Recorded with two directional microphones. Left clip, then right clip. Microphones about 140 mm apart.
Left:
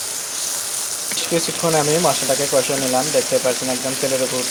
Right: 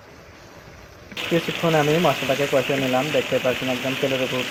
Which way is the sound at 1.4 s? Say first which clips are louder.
Left 1 dB; 25° left (ahead or behind).